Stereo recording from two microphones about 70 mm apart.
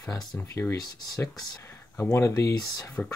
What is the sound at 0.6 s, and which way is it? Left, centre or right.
Speech, left.